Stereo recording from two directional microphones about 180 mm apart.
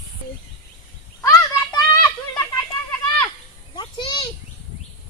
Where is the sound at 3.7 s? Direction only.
25° left (ahead or behind).